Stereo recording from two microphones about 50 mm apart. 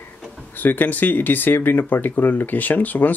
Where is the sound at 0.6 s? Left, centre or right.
Left.